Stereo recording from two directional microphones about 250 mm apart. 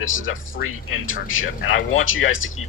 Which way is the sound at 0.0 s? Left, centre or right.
Left.